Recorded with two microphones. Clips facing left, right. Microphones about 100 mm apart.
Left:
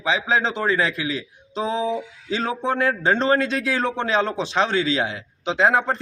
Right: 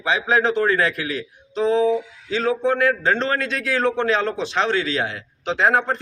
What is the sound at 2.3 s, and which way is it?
Speech, 25° left (ahead or behind).